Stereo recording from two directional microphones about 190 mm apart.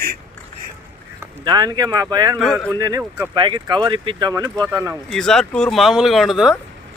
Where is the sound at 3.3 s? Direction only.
25° right (ahead or behind).